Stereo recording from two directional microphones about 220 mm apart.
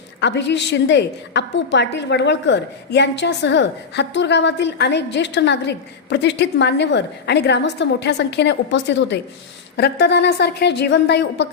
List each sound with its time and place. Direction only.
0.2 s a woman's voice: 50° left (ahead or behind)